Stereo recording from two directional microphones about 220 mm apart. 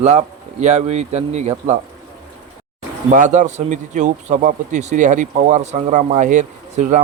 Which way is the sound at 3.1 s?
35° right (ahead or behind).